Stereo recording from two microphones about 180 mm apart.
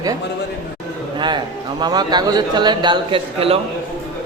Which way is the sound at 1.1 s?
25° right (ahead or behind).